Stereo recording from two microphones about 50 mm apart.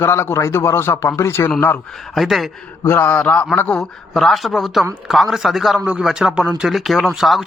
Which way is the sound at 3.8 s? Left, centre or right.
Centre.